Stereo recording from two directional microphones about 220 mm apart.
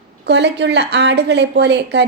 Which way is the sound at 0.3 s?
50° right (ahead or behind).